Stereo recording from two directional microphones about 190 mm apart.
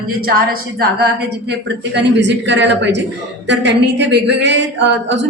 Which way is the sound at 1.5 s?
65° right (ahead or behind).